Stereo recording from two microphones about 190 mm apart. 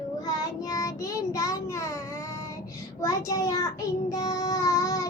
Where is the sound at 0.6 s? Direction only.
20° left (ahead or behind).